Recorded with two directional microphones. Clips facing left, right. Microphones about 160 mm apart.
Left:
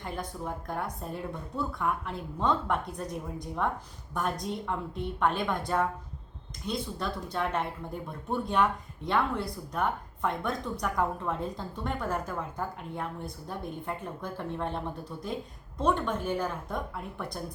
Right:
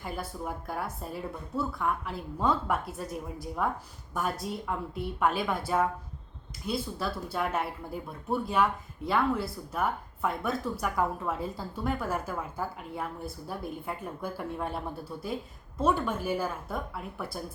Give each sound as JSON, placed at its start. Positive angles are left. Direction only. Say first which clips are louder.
{"t": 0.0, "sound": "speech", "louder": "even", "side_deg": -5}
{"t": 15.8, "sound": "speech", "louder": "even", "side_deg": -5}